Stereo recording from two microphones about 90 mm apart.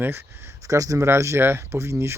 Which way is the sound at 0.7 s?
40° right (ahead or behind).